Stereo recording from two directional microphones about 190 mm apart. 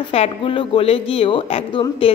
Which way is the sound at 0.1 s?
30° left (ahead or behind).